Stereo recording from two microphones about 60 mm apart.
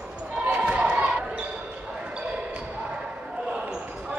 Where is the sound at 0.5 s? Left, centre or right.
Centre.